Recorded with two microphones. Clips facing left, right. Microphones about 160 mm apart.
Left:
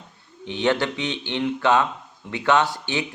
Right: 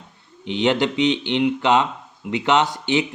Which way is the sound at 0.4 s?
20° right (ahead or behind).